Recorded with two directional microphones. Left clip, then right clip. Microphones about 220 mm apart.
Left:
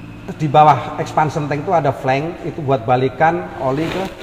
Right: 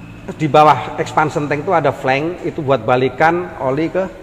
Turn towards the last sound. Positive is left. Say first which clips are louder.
# right 1 dB
turn(degrees=-25)  # may be behind; listen again after turning